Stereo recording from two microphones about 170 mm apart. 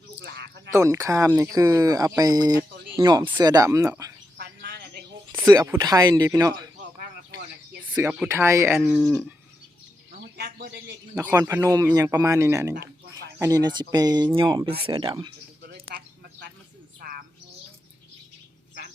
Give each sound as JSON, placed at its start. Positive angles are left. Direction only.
{"t": 0.2, "sound": "a sound", "side_deg": -80}
{"t": 0.7, "sound": "speech", "side_deg": -15}
{"t": 4.4, "sound": "bird", "side_deg": -75}
{"t": 5.3, "sound": "speech", "side_deg": -15}
{"t": 7.9, "sound": "speech", "side_deg": -10}
{"t": 8.8, "sound": "speech", "side_deg": -5}
{"t": 10.3, "sound": "speech", "side_deg": -65}
{"t": 11.3, "sound": "speech", "side_deg": -15}
{"t": 12.7, "sound": "a sound", "side_deg": -75}
{"t": 13.4, "sound": "speech", "side_deg": -20}
{"t": 15.6, "sound": "a sound", "side_deg": -75}
{"t": 17.0, "sound": "bird", "side_deg": -60}